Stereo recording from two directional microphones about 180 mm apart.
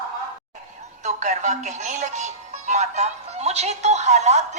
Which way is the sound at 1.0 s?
40° right (ahead or behind).